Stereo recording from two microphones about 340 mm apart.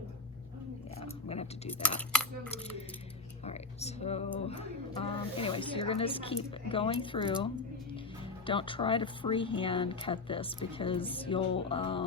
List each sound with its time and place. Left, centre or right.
0.9 s a sound: centre
2.0 s speech: centre
3.4 s speech: centre